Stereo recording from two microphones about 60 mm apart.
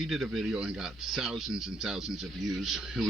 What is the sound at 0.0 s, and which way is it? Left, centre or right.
Speech, centre.